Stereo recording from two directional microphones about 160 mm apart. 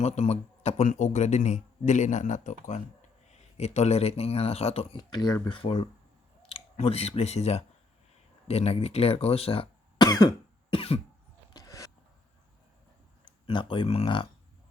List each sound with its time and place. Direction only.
0.0 s speech: 45° left (ahead or behind)
5.1 s speech: 25° left (ahead or behind)
10.1 s cough: 25° left (ahead or behind)
10.7 s speech: 35° left (ahead or behind)
11.5 s a sound: 20° left (ahead or behind)
13.2 s speech: 30° left (ahead or behind)